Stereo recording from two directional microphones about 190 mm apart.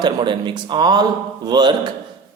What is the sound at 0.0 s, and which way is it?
A man's voice, 25° right (ahead or behind).